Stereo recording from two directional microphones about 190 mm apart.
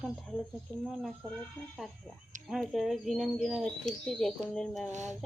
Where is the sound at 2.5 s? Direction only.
Centre (ahead or behind).